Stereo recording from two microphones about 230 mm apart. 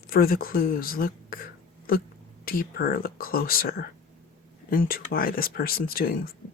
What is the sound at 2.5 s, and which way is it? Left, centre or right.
Speech, left.